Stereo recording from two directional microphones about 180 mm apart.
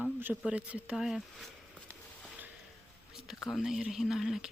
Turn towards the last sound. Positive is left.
turn(degrees=0)  # may be behind; listen again after turning